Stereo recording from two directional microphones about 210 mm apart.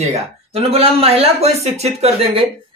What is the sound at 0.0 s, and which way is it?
Speech, 30° right (ahead or behind).